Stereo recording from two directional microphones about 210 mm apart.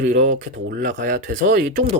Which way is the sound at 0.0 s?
35° right (ahead or behind).